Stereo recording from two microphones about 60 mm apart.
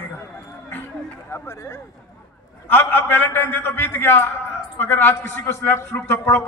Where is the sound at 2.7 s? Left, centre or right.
Left.